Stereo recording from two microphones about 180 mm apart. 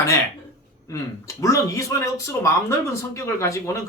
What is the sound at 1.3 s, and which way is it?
Speech, 20° left (ahead or behind).